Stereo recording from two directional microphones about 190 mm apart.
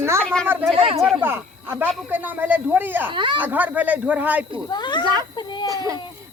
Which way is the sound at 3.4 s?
10° right (ahead or behind).